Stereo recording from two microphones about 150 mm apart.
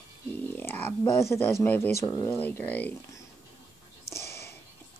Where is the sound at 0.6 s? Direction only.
10° left (ahead or behind).